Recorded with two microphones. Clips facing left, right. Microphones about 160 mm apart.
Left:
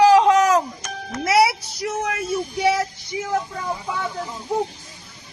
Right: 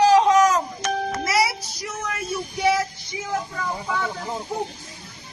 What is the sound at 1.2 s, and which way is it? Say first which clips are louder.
Child singing: left 9 dB; 65° left (ahead or behind).